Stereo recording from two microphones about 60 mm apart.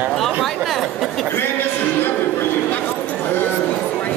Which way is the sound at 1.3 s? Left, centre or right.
Left.